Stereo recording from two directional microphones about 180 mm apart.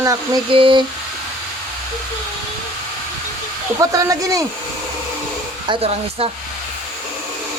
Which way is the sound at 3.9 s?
20° right (ahead or behind).